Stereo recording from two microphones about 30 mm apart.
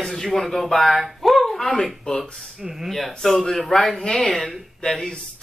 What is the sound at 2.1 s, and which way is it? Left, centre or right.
Speech, left.